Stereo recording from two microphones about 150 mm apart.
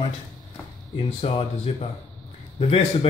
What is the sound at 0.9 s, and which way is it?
Speech, 40° left (ahead or behind).